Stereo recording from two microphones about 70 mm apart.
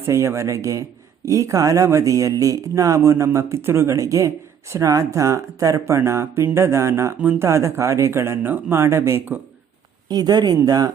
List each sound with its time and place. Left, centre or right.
0.0 s speech: right
10.1 s speech: right